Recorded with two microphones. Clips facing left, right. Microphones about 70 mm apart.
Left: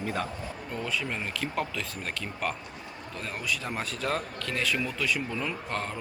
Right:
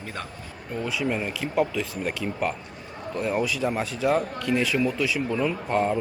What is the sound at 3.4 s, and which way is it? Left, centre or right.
Speech, centre.